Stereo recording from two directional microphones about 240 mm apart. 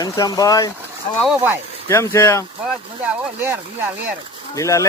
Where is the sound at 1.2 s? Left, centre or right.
Centre.